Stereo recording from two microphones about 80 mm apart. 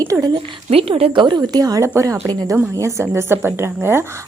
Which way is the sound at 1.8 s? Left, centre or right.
Right.